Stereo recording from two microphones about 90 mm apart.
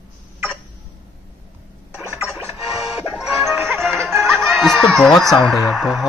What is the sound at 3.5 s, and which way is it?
Music, 30° right (ahead or behind).